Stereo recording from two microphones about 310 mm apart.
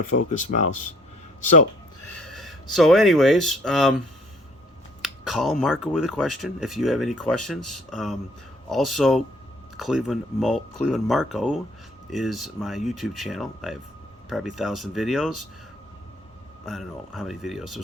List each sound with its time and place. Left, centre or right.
0.3 s speech: left
2.1 s speech: centre
5.0 s speech: centre
16.6 s speech: centre